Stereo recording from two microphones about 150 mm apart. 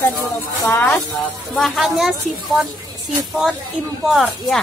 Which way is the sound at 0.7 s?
15° left (ahead or behind).